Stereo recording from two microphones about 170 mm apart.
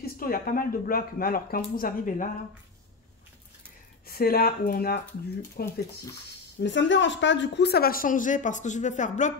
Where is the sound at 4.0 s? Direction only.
60° left (ahead or behind).